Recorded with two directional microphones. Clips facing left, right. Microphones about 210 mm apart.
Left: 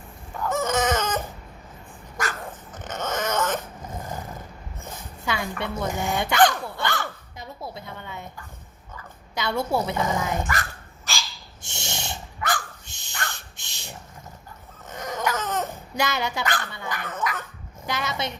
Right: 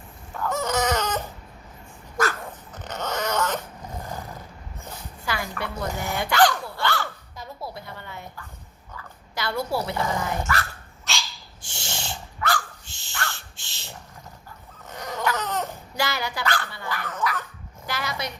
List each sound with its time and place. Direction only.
0.5 s chicken: 20° left (ahead or behind)
2.8 s dog: 20° left (ahead or behind)
5.2 s a sound: 20° left (ahead or behind)
9.3 s speech: 20° left (ahead or behind)
11.6 s dog: 20° left (ahead or behind)
14.9 s dog: 20° left (ahead or behind)
17.8 s a sound: 20° left (ahead or behind)